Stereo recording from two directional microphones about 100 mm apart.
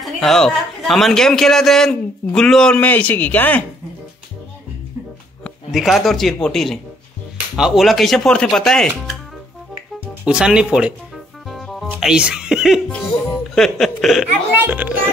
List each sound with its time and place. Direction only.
0.0 s a man's voice: centre (ahead or behind)
5.7 s a man's voice: centre (ahead or behind)
10.2 s speech: 10° right (ahead or behind)
11.4 s music: centre (ahead or behind)
12.0 s a man's voice: 5° right (ahead or behind)
14.5 s speech: 15° right (ahead or behind)